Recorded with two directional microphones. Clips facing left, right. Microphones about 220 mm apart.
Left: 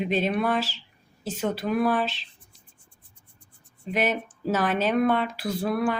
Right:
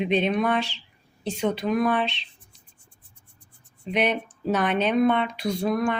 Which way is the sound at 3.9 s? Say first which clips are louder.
Right 2 dB; 5° left (ahead or behind).